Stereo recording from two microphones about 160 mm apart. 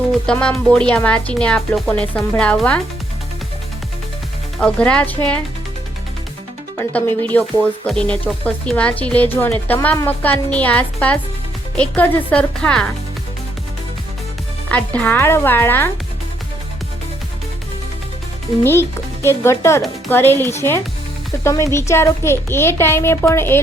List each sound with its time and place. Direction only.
0.3 s speech: 5° left (ahead or behind)
4.6 s speech: 5° left (ahead or behind)
7.2 s speech: 10° left (ahead or behind)
14.7 s speech: 10° left (ahead or behind)
18.6 s speech: 15° left (ahead or behind)